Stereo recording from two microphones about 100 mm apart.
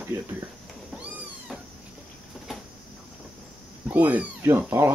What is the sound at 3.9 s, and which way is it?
Speech, 15° right (ahead or behind).